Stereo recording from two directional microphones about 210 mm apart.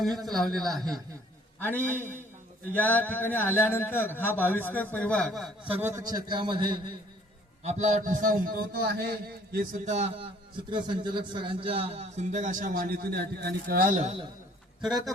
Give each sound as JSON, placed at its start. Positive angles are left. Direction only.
{"t": 0.2, "sound": "a man's voice", "side_deg": 0}
{"t": 7.6, "sound": "a man's voice", "side_deg": -35}
{"t": 14.8, "sound": "a man's voice", "side_deg": 0}